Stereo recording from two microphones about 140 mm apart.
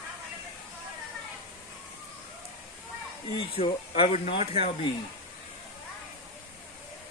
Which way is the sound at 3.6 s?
45° left (ahead or behind).